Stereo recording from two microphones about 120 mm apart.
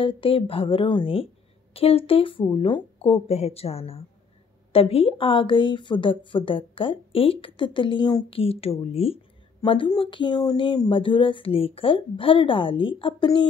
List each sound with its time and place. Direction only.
0.0 s speech: 50° left (ahead or behind)
1.7 s speech: 55° left (ahead or behind); by 8.4 s 40° left (ahead or behind)
8.4 s speech: 55° left (ahead or behind)
9.6 s speech: 40° left (ahead or behind)